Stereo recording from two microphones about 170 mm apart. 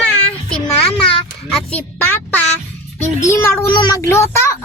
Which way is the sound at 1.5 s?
10° left (ahead or behind).